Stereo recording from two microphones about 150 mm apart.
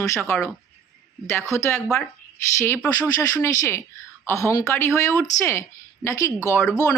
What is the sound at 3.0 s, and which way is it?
Speech, 20° left (ahead or behind).